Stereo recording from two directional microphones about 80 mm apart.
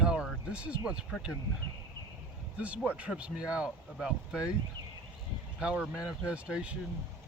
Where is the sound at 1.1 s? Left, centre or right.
Centre.